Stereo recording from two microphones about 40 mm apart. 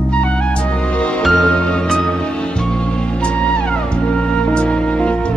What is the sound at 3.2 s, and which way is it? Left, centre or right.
Music, left.